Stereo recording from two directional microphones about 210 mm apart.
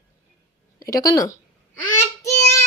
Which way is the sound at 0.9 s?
15° left (ahead or behind).